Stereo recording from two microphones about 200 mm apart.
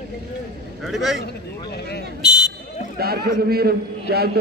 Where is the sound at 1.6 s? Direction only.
55° left (ahead or behind).